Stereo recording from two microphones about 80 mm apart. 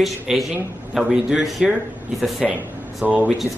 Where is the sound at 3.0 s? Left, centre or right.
Centre.